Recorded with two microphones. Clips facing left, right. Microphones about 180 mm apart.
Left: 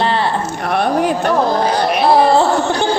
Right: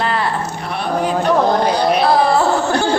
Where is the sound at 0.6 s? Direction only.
55° left (ahead or behind).